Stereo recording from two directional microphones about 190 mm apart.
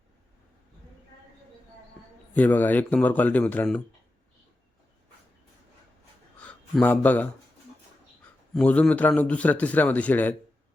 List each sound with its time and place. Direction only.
2.3 s a man's voice: 10° left (ahead or behind)
6.4 s speech: 5° left (ahead or behind)
8.5 s a man's voice: 5° left (ahead or behind)